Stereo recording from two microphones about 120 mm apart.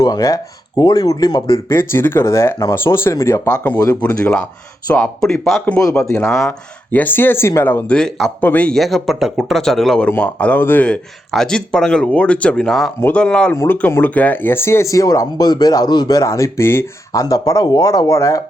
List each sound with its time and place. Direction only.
0.0 s speech: 30° left (ahead or behind); by 3.8 s 15° left (ahead or behind)
4.9 s speech: 5° left (ahead or behind)
6.0 s speech: 20° left (ahead or behind)